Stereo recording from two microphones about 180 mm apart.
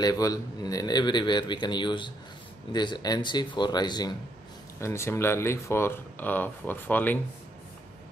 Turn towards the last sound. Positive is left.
turn(degrees=10)  # may be behind; listen again after turning